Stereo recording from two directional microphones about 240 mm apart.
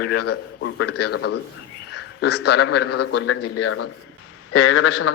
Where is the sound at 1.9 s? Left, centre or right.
Left.